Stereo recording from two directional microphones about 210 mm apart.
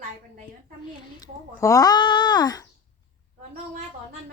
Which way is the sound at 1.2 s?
15° left (ahead or behind).